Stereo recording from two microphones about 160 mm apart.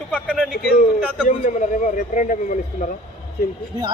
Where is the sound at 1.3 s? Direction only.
50° left (ahead or behind).